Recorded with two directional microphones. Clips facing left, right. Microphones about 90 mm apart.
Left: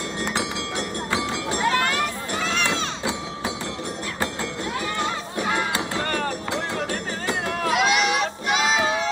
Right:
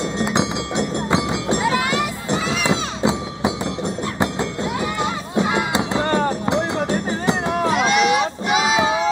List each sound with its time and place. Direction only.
0.2 s music: 20° right (ahead or behind)
1.6 s run: 5° right (ahead or behind)
3.0 s music: 20° right (ahead or behind)
7.7 s run: centre (ahead or behind)